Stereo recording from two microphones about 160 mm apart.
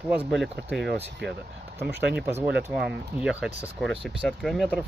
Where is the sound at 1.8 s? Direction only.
15° right (ahead or behind).